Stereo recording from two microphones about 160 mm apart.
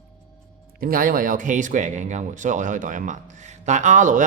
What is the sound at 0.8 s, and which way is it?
Speech, 65° right (ahead or behind).